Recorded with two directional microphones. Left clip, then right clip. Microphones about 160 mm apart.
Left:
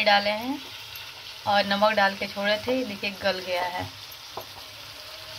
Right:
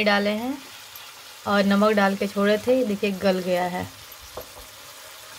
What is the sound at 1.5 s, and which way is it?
Speech, 65° right (ahead or behind).